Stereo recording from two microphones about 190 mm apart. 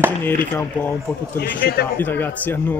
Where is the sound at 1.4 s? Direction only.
55° left (ahead or behind).